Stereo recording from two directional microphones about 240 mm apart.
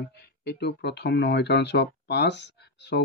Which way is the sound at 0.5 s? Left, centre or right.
Left.